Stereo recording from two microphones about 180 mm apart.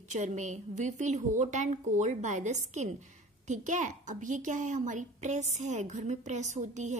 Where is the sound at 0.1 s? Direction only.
40° right (ahead or behind).